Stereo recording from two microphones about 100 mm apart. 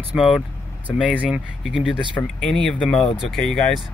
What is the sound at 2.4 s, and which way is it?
Speech, 5° left (ahead or behind).